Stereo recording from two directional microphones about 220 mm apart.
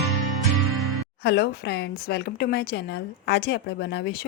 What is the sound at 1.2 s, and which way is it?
Speech, 45° left (ahead or behind).